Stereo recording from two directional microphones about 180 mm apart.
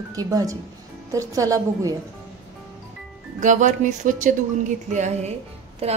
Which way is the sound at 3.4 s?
45° right (ahead or behind).